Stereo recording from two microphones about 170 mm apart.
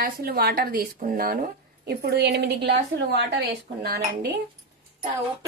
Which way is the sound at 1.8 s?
70° right (ahead or behind).